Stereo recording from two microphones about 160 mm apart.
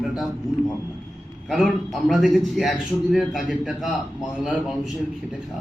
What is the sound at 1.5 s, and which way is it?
A man's voice, centre (ahead or behind).